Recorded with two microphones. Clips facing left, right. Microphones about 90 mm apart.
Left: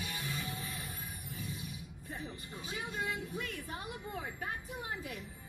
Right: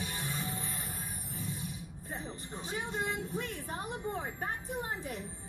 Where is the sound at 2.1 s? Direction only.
25° right (ahead or behind).